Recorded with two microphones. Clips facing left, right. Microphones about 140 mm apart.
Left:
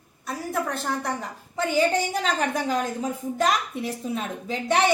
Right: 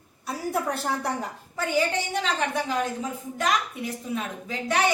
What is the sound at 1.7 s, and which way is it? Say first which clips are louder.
A woman's voice: left 3 dB; 40° left (ahead or behind).